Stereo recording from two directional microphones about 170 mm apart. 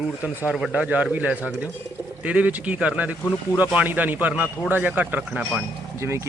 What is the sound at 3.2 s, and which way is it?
Speech, 10° left (ahead or behind).